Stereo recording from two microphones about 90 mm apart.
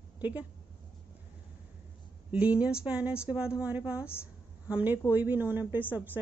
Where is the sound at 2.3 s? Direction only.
15° right (ahead or behind).